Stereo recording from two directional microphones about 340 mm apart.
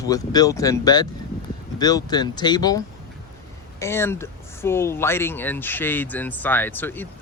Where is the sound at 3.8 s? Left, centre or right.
Centre.